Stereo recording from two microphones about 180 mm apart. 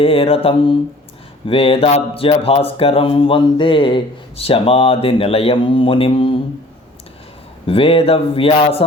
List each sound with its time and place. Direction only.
0.0 s speech: 30° left (ahead or behind)
7.7 s speech: 30° left (ahead or behind)